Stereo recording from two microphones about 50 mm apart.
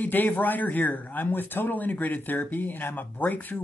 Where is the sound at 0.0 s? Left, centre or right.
Left.